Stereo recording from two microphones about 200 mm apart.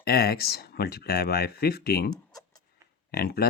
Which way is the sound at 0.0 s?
50° left (ahead or behind).